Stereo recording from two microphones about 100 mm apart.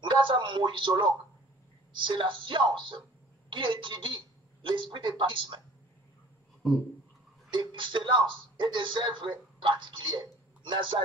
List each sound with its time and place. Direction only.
0.0 s a woman's voice: 55° right (ahead or behind)
7.5 s speech: 55° right (ahead or behind)